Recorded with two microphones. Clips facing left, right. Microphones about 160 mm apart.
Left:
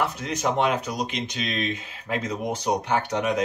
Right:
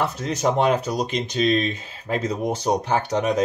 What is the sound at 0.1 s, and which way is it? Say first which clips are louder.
Speech: right 4 dB; 35° right (ahead or behind).